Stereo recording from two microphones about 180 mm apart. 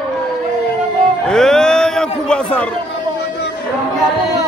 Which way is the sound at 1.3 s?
5° left (ahead or behind).